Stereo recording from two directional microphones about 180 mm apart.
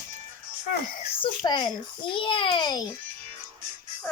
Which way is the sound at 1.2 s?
25° left (ahead or behind).